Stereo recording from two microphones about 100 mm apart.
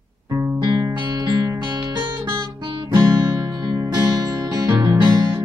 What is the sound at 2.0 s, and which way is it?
Guitar, 50° right (ahead or behind).